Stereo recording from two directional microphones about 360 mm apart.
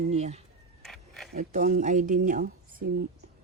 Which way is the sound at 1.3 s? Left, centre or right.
Right.